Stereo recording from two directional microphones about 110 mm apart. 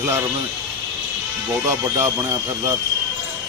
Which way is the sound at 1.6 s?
25° right (ahead or behind).